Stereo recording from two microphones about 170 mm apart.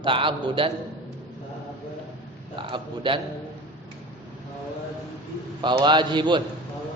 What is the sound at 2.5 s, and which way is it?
Speech, 30° right (ahead or behind).